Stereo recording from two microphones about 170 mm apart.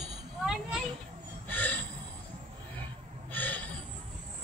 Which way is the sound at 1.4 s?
10° left (ahead or behind).